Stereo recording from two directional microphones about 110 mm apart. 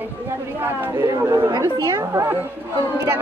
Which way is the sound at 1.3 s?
35° right (ahead or behind).